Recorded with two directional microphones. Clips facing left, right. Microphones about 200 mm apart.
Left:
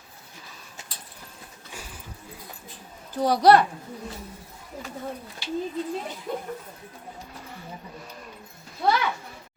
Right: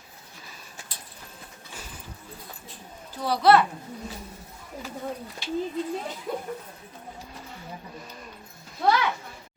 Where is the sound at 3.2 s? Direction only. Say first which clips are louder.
Left 2 dB; 40° left (ahead or behind).